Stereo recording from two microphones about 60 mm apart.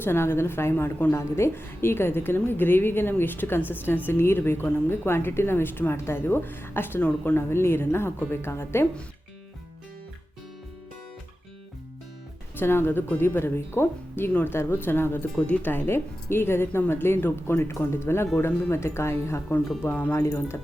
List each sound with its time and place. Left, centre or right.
0.0 s a woman's voice: left
12.5 s a woman's voice: left
19.9 s speech: left
20.1 s a woman's voice: left